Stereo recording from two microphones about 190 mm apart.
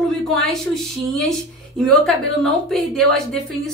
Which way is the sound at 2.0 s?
Centre (ahead or behind).